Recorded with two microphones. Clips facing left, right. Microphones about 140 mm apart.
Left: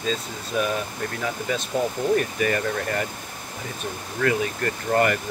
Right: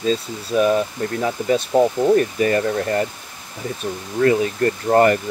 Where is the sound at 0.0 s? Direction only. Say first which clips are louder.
Right 6 dB; 40° right (ahead or behind).